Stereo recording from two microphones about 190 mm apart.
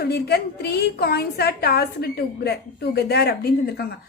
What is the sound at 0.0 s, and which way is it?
A woman's voice, 55° left (ahead or behind).